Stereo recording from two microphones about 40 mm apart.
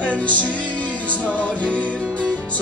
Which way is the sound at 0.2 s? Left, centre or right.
Left.